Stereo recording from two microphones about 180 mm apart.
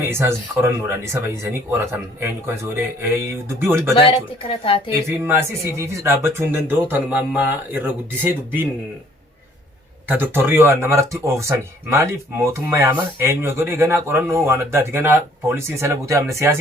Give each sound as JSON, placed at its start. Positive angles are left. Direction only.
{"t": 0.1, "sound": "speech", "side_deg": -15}
{"t": 3.9, "sound": "speech", "side_deg": 30}
{"t": 5.2, "sound": "speech", "side_deg": -15}
{"t": 10.1, "sound": "speech", "side_deg": -10}